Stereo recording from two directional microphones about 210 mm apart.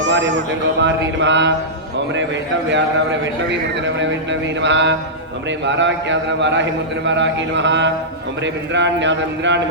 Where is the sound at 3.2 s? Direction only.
60° right (ahead or behind).